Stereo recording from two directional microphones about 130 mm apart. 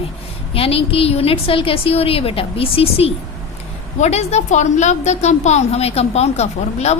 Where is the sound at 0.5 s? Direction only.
45° left (ahead or behind).